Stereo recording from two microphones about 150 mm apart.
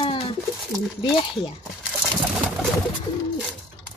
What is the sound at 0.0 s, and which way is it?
Bird, 40° left (ahead or behind).